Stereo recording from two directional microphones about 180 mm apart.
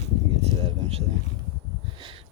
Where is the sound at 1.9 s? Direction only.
30° right (ahead or behind).